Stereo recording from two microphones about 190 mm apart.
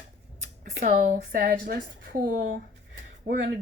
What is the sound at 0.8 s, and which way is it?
A woman's voice, 40° right (ahead or behind).